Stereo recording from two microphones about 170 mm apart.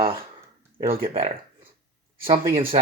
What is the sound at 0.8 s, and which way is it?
Speech, 35° right (ahead or behind).